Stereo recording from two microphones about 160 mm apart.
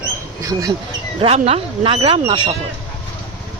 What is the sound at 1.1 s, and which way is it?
Speech, 35° right (ahead or behind).